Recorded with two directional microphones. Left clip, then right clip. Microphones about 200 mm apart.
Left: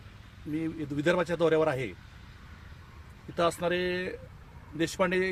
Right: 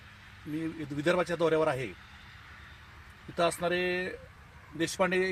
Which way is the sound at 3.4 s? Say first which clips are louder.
Left 1 dB; 25° left (ahead or behind).